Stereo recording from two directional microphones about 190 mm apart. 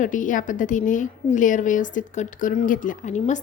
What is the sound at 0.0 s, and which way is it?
A woman's voice, 45° left (ahead or behind).